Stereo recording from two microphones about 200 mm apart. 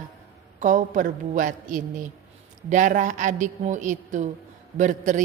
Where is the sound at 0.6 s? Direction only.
40° right (ahead or behind).